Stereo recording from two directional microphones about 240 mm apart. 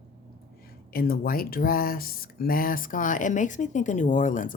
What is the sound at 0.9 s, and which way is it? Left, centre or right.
Speech, left.